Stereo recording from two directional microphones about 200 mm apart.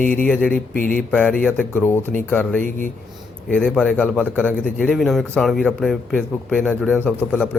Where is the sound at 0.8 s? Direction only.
45° left (ahead or behind).